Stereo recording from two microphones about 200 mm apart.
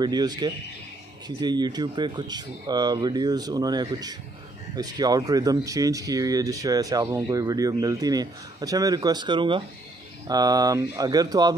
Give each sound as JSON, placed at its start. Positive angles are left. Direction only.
{"t": 0.0, "sound": "speech", "side_deg": -20}